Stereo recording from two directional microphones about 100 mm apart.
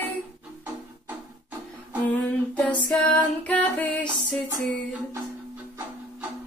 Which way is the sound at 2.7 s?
15° left (ahead or behind).